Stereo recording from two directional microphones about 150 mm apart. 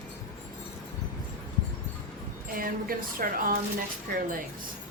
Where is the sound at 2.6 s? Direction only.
70° right (ahead or behind).